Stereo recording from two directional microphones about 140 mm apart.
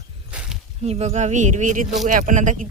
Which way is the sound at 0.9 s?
50° right (ahead or behind).